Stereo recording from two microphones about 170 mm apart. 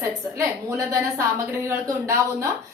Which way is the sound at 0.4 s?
20° right (ahead or behind).